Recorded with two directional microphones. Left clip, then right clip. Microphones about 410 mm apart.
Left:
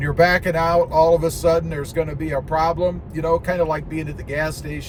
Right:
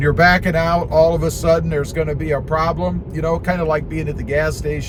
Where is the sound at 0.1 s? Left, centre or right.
Centre.